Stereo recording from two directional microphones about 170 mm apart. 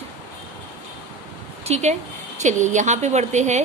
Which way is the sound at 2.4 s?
45° right (ahead or behind).